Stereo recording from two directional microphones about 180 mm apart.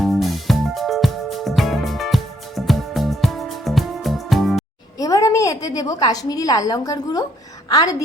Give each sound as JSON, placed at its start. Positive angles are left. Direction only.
{"t": 0.0, "sound": "music", "side_deg": 0}
{"t": 4.9, "sound": "a woman's voice", "side_deg": 20}